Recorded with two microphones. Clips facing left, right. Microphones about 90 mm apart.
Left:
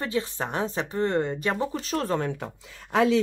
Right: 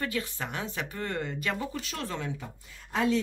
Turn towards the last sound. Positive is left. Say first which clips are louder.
# left 6 dB
turn(degrees=90)